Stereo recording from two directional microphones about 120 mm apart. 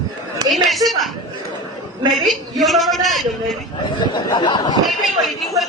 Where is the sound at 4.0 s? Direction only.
40° left (ahead or behind).